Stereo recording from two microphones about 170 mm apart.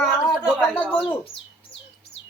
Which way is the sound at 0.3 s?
5° right (ahead or behind).